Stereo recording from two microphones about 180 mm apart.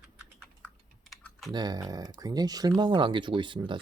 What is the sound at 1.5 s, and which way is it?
Speech, 20° right (ahead or behind).